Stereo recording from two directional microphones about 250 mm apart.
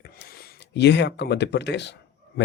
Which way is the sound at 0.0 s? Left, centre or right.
Left.